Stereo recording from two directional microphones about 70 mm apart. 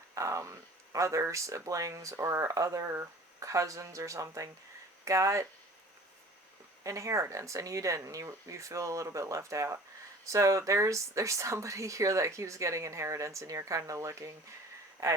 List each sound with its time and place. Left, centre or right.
0.1 s a sound: right
0.9 s speech: right
6.8 s speech: right